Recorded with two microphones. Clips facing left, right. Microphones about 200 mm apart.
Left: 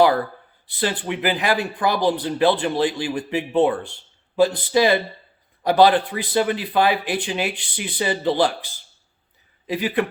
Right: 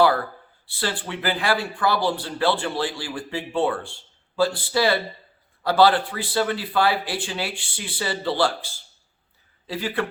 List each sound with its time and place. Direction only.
0.7 s speech: 15° left (ahead or behind)